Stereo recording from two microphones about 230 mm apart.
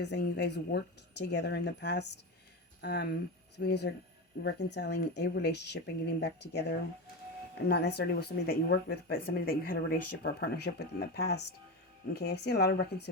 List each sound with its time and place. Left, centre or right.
0.0 s speech: left